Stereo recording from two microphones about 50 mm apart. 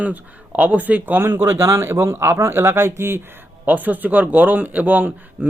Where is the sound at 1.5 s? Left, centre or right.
Right.